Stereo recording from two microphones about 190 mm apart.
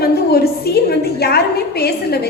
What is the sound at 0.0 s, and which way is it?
A woman's voice, 55° left (ahead or behind).